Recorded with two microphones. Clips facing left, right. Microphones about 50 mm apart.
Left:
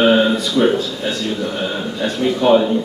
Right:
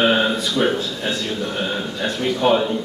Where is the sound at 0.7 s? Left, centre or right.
Centre.